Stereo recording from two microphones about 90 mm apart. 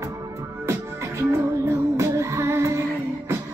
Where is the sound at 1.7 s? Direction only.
35° right (ahead or behind).